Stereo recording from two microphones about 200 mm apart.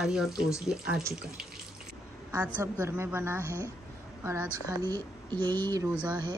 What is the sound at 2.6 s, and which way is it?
A woman's voice, 15° right (ahead or behind).